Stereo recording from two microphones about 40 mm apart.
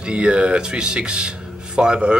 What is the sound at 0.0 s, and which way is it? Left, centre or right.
Speech, right.